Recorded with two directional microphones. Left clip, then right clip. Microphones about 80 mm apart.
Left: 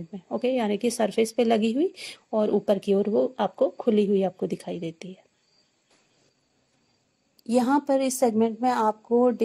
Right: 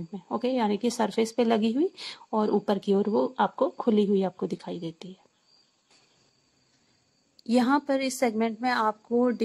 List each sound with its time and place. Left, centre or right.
0.1 s speech: centre
2.1 s speech: centre
7.4 s a woman's voice: left